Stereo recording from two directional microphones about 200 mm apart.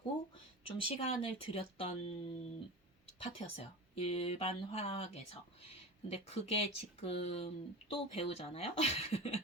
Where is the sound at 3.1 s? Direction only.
30° left (ahead or behind).